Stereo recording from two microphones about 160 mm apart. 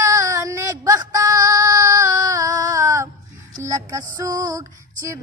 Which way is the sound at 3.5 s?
20° right (ahead or behind).